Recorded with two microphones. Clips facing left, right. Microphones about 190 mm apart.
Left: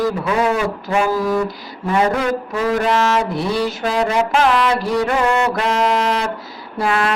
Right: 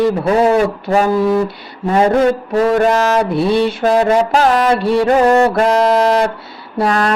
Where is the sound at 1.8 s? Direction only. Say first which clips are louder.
Right 6 dB; 35° right (ahead or behind).